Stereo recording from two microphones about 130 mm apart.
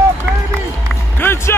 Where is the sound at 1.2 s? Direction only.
20° left (ahead or behind).